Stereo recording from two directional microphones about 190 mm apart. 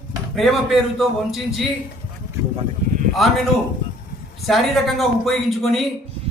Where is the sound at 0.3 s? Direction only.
Centre (ahead or behind).